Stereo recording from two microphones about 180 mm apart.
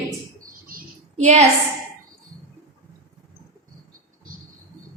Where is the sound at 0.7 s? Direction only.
45° right (ahead or behind).